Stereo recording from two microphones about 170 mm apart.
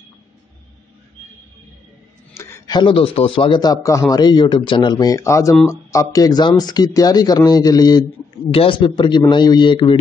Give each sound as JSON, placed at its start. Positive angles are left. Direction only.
{"t": 2.3, "sound": "speech", "side_deg": 20}